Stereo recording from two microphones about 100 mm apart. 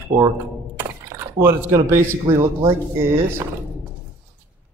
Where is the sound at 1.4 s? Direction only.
25° right (ahead or behind).